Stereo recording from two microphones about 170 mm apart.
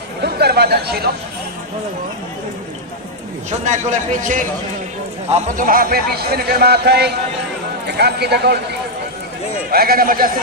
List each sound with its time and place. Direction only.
0.2 s speech: 70° right (ahead or behind)
3.6 s speech: 45° right (ahead or behind)
5.5 s speech: 55° right (ahead or behind); by 8.5 s 75° right (ahead or behind)
9.7 s speech: 60° right (ahead or behind)